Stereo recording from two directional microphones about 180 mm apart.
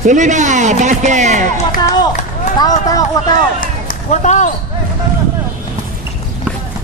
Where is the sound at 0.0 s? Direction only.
45° right (ahead or behind).